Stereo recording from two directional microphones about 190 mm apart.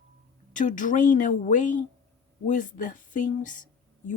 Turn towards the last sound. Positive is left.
turn(degrees=40)  # may be behind; listen again after turning